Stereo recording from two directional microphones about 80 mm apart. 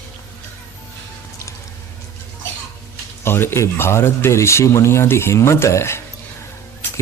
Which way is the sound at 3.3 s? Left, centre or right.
Left.